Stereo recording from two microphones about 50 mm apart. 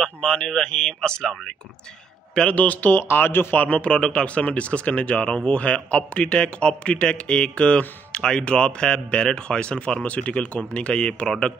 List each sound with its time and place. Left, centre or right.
0.0 s speech: centre
2.5 s speech: left
3.5 s speech: left